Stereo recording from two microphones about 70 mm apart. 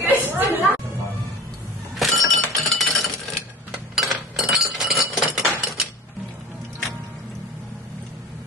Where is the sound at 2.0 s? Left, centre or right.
Centre.